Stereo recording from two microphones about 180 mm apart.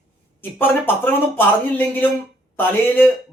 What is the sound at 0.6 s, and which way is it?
Speech, 10° left (ahead or behind).